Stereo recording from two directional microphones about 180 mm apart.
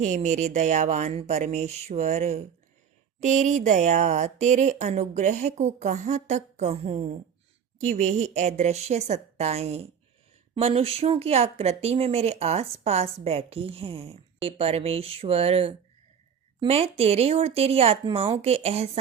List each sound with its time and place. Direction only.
0.0 s speech: 40° right (ahead or behind)